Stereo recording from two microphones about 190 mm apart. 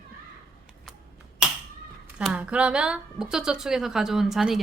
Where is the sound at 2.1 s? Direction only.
5° right (ahead or behind).